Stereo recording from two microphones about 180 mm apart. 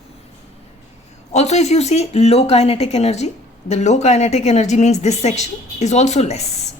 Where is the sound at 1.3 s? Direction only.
40° left (ahead or behind).